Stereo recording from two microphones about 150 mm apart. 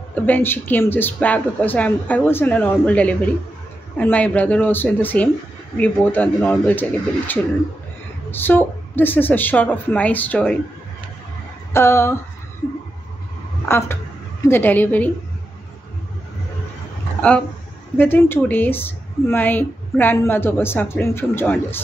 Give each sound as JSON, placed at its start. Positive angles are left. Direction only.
{"t": 0.1, "sound": "speech", "side_deg": 15}
{"t": 11.7, "sound": "speech", "side_deg": 15}
{"t": 13.7, "sound": "speech", "side_deg": 15}
{"t": 17.9, "sound": "speech", "side_deg": 15}